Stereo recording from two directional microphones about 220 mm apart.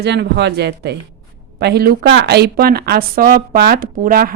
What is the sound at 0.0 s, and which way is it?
Speech, 50° right (ahead or behind).